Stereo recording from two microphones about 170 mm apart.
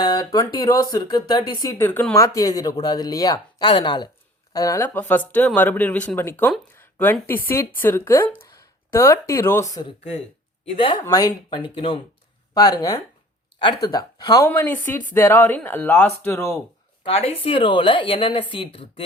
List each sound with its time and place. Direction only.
0.0 s speech: 25° left (ahead or behind)
10.7 s a woman's voice: 30° left (ahead or behind)
11.0 s speech: 20° left (ahead or behind)
17.0 s a woman's voice: 35° left (ahead or behind)